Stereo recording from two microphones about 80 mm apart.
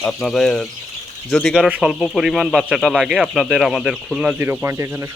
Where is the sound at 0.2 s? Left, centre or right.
Centre.